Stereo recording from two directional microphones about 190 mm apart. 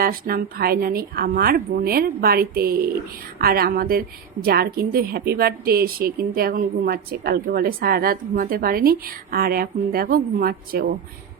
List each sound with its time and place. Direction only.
0.0 s a woman's voice: 50° right (ahead or behind)